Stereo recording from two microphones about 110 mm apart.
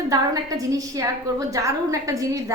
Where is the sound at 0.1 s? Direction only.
35° right (ahead or behind).